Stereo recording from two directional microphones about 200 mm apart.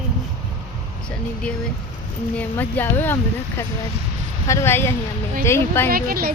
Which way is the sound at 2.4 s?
10° left (ahead or behind).